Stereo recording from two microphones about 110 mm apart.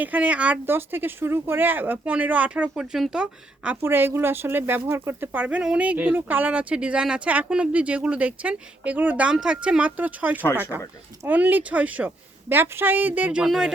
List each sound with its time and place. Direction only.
0.0 s speech: 15° right (ahead or behind)
3.8 s speech: 20° right (ahead or behind); by 13.7 s 5° right (ahead or behind)